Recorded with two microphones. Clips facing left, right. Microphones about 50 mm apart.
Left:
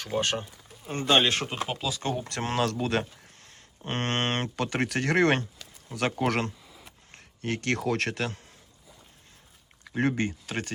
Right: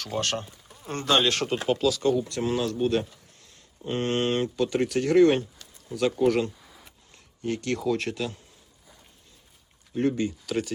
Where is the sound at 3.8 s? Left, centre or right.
Left.